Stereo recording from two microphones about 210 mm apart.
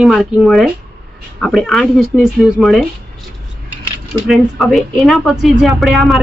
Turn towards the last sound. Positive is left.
turn(degrees=0)  # may be behind; listen again after turning